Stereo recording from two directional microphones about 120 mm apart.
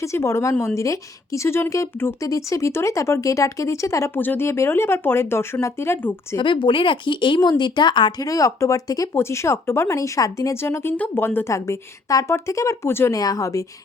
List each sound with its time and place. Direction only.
0.0 s speech: 25° left (ahead or behind)
6.3 s speech: 40° left (ahead or behind)
8.3 s speech: 30° left (ahead or behind)